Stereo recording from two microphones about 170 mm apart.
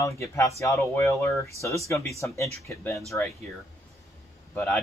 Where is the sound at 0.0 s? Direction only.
20° left (ahead or behind).